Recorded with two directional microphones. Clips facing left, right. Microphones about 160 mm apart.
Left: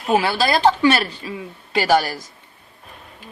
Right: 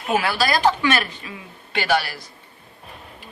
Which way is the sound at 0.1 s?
30° left (ahead or behind).